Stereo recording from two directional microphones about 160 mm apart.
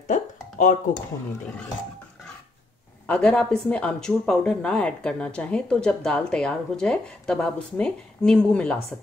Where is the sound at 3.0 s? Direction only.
10° left (ahead or behind).